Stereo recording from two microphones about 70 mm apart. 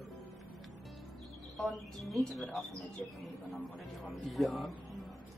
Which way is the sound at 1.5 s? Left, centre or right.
Centre.